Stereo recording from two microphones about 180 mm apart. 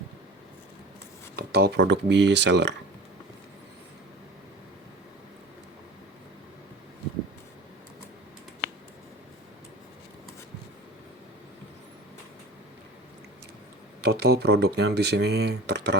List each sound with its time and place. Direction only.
1.4 s speech: 60° right (ahead or behind)
14.0 s speech: 65° right (ahead or behind)